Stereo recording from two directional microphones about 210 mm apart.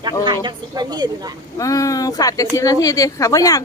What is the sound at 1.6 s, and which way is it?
A woman's voice, 15° left (ahead or behind).